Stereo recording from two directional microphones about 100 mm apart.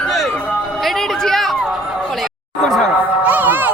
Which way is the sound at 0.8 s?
5° left (ahead or behind).